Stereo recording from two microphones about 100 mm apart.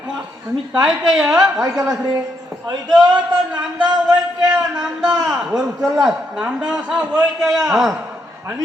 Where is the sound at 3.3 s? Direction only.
45° right (ahead or behind).